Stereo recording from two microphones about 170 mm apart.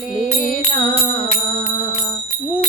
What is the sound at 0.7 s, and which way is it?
Music, 60° right (ahead or behind).